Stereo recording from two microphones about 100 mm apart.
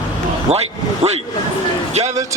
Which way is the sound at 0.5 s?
90° right.